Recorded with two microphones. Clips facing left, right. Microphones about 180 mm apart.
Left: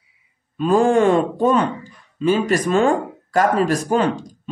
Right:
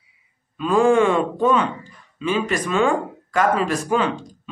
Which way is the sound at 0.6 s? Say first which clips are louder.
Left 1 dB; 40° left (ahead or behind).